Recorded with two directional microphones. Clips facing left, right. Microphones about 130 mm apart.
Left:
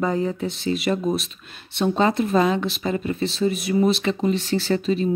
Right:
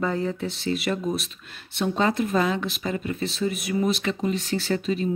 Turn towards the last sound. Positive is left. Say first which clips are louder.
# left 4 dB
turn(degrees=30)  # may be behind; listen again after turning